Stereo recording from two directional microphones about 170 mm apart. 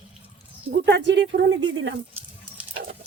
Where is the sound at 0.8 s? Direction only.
85° right.